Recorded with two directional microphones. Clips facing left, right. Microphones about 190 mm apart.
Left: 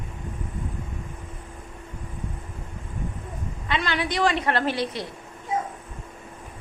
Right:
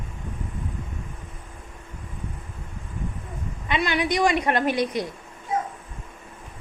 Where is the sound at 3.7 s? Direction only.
15° right (ahead or behind).